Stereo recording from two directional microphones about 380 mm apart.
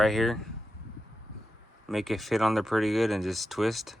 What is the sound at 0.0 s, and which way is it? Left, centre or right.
Speech, centre.